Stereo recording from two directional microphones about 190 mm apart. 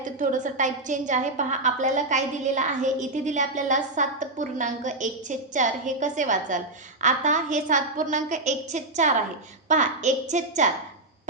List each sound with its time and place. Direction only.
0.0 s a woman's voice: 40° right (ahead or behind)